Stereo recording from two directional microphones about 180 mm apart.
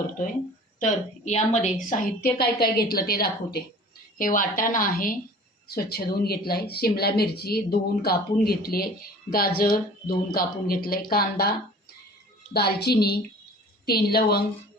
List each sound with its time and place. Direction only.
0.8 s a woman's voice: 40° left (ahead or behind)
1.9 s a woman's voice: 55° left (ahead or behind)
12.5 s speech: 65° left (ahead or behind)